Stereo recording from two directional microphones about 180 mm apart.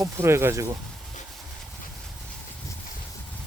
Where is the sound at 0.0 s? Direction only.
15° right (ahead or behind).